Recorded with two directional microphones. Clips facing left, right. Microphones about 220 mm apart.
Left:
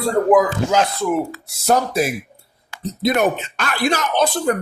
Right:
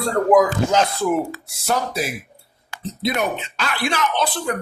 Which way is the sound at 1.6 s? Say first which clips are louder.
Left 5 dB; 50° left (ahead or behind).